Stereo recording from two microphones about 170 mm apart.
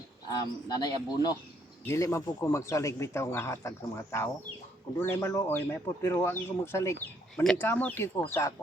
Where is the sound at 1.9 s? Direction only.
15° left (ahead or behind).